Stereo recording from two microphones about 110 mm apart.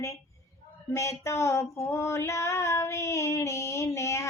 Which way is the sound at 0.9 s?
25° left (ahead or behind).